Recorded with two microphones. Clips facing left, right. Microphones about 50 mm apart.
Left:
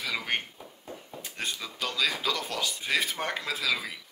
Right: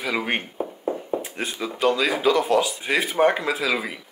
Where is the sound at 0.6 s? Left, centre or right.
Right.